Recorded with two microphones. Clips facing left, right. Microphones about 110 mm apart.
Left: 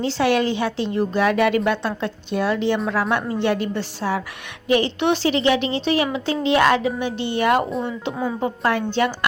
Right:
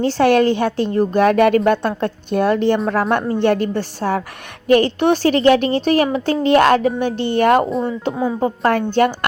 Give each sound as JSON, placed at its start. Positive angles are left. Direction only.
{"t": 0.0, "sound": "a woman's voice", "side_deg": -50}
{"t": 8.9, "sound": "a woman's voice", "side_deg": -50}